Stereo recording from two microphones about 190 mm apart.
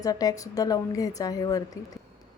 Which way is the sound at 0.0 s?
20° left (ahead or behind).